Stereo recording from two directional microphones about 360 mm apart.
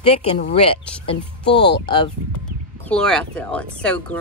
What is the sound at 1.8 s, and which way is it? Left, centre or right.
Speech, centre.